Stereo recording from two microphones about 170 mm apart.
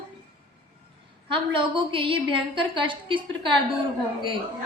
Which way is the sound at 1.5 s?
30° right (ahead or behind).